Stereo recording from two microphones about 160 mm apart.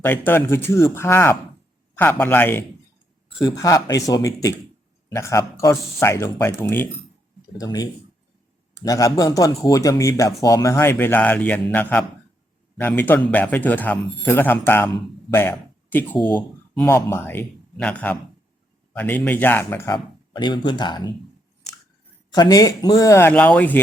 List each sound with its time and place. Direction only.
0.0 s a man's voice: 15° left (ahead or behind)
7.6 s a man's voice: 25° left (ahead or behind)
20.3 s speech: 30° left (ahead or behind)
22.4 s a man's voice: 20° left (ahead or behind)